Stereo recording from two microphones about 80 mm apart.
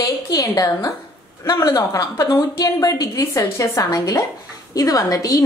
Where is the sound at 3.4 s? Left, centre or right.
Left.